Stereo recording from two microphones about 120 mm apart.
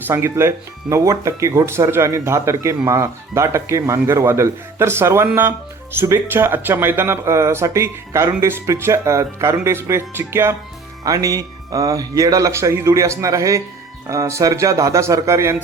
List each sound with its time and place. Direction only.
0.1 s speech: 20° right (ahead or behind)